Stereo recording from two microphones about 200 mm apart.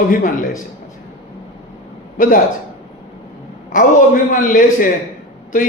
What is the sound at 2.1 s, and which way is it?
Speech, 45° left (ahead or behind).